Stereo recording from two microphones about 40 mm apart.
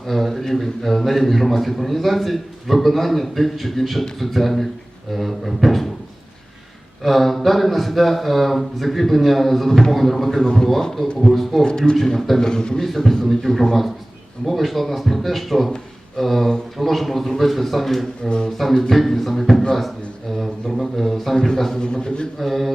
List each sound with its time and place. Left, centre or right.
0.1 s a man's voice: centre
7.0 s a man's voice: centre
10.2 s a man's voice: centre
11.6 s a man's voice: centre
11.9 s a man's voice: centre
12.4 s a man's voice: centre
12.8 s a man's voice: centre
18.2 s a man's voice: left
18.5 s a man's voice: centre
21.3 s a man's voice: centre
22.4 s a man's voice: centre